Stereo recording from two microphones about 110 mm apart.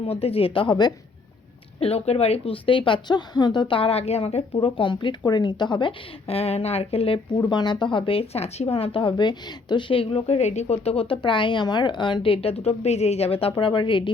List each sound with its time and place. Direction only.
0.1 s speech: 65° left (ahead or behind); by 0.9 s 40° left (ahead or behind)
1.8 s speech: 70° left (ahead or behind)
4.6 s speech: 50° left (ahead or behind)
6.2 s speech: 65° left (ahead or behind)
7.5 s speech: 40° left (ahead or behind)